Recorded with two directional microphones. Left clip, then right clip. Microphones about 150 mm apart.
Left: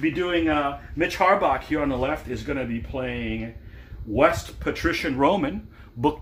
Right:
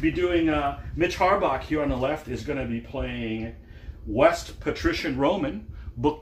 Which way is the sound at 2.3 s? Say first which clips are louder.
Left 1 dB; 45° left (ahead or behind).